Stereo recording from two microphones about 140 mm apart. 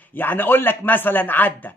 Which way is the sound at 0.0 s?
15° left (ahead or behind).